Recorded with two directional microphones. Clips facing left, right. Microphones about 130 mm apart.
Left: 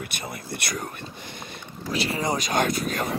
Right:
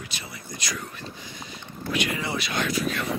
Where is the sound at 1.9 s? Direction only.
35° left (ahead or behind).